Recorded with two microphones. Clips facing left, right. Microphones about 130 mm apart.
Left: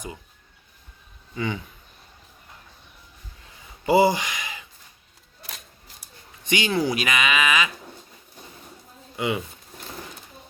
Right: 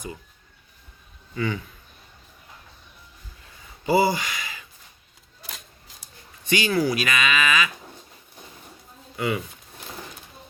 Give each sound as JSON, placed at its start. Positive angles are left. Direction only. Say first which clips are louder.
{"t": 3.8, "sound": "speech", "louder": "left 2 dB", "side_deg": 15}
{"t": 5.4, "sound": "a sound", "louder": "even", "side_deg": 0}
{"t": 6.4, "sound": "speech", "louder": "right 1 dB", "side_deg": 20}
{"t": 9.1, "sound": "speech", "louder": "even", "side_deg": 20}